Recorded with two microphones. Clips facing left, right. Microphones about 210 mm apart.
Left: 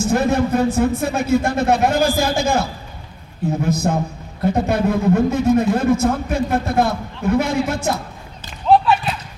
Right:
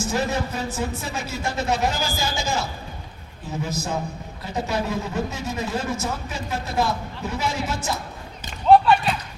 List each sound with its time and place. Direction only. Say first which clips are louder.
0.1 s a man's voice: left 10 dB; 55° left (ahead or behind)
8.7 s basketball bounce: even; centre (ahead or behind)